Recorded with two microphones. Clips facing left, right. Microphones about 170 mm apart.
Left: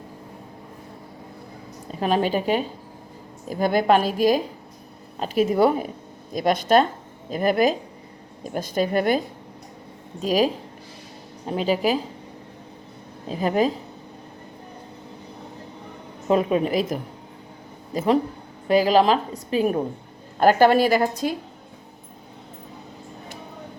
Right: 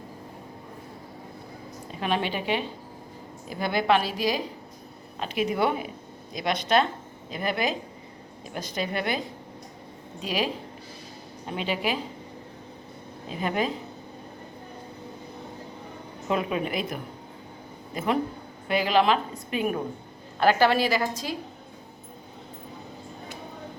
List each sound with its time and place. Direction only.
2.0 s a woman's voice: 40° left (ahead or behind)
13.2 s a woman's voice: 40° left (ahead or behind)
16.3 s a woman's voice: 40° left (ahead or behind)
20.4 s a woman's voice: 45° left (ahead or behind)